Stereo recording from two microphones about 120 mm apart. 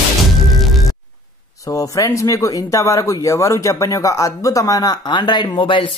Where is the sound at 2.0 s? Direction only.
25° left (ahead or behind).